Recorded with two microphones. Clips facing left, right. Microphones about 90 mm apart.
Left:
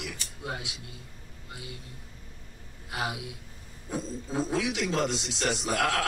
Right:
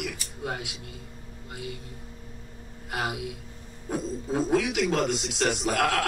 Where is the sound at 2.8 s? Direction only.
55° right (ahead or behind).